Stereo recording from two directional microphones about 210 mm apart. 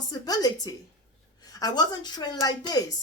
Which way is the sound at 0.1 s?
20° left (ahead or behind).